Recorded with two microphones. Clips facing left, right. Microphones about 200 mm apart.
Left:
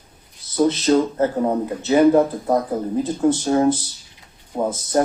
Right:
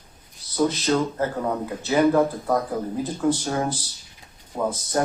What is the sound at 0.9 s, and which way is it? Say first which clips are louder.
Speech: left 5 dB; 25° left (ahead or behind).